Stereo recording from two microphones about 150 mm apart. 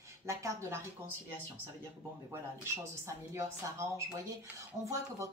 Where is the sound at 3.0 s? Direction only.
20° right (ahead or behind).